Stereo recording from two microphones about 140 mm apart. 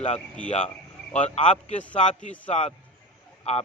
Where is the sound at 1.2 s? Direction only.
55° left (ahead or behind).